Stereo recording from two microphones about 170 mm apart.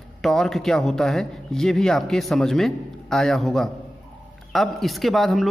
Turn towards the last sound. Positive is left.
turn(degrees=0)  # may be behind; listen again after turning